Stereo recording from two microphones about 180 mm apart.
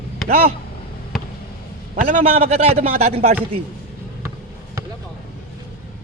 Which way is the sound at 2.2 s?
35° right (ahead or behind).